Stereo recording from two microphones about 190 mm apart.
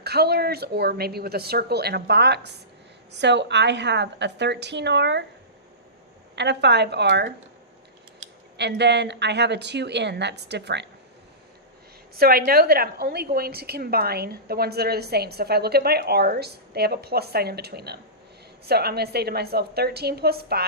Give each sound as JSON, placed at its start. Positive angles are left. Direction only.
{"t": 0.0, "sound": "a woman's voice", "side_deg": -55}
{"t": 6.3, "sound": "a woman's voice", "side_deg": -65}
{"t": 8.5, "sound": "a woman's voice", "side_deg": -65}
{"t": 12.1, "sound": "a woman's voice", "side_deg": -50}